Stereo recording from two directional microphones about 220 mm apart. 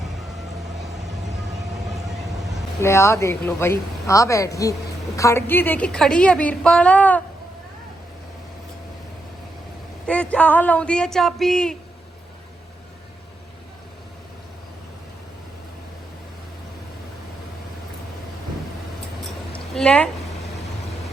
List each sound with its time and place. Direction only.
2.8 s a woman's voice: 10° left (ahead or behind)
10.1 s a woman's voice: 5° left (ahead or behind)
19.5 s a sound: 5° left (ahead or behind)